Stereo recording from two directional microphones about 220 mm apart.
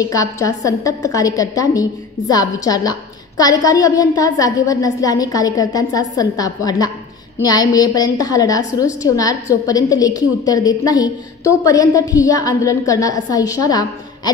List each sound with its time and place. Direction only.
0.0 s a woman's voice: 15° left (ahead or behind)